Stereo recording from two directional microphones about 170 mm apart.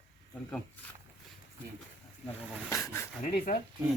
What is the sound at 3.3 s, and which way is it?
Speech, 60° left (ahead or behind).